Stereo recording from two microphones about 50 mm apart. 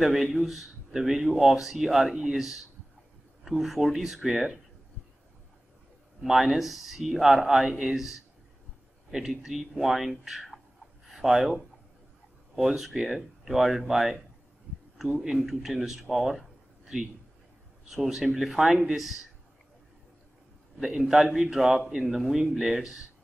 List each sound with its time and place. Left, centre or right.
0.0 s speech: centre
6.2 s speech: centre
11.1 s a sound: centre
12.5 s speech: centre
15.1 s speech: centre
16.8 s a sound: centre
17.8 s speech: centre
20.8 s speech: centre